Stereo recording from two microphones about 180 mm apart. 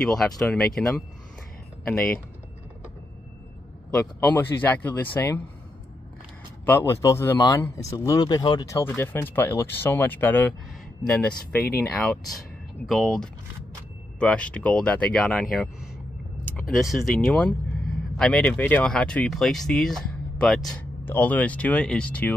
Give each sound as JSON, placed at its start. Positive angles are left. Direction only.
{"t": 0.0, "sound": "speech", "side_deg": 0}
{"t": 3.9, "sound": "speech", "side_deg": 10}
{"t": 6.9, "sound": "speech", "side_deg": 15}
{"t": 16.9, "sound": "speech", "side_deg": 0}